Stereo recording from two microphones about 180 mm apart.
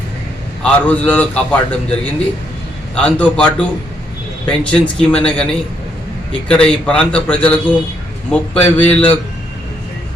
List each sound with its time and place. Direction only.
0.6 s a man's voice: 10° left (ahead or behind)